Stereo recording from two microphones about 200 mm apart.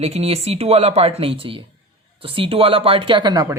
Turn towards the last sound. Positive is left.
turn(degrees=-20)  # may be behind; listen again after turning